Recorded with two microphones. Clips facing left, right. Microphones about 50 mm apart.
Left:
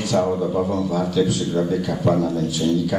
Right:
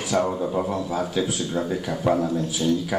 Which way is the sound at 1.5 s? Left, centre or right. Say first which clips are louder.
Left 4 dB; centre.